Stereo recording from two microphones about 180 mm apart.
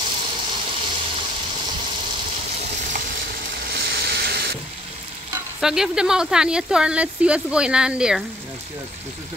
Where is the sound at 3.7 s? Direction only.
60° right (ahead or behind).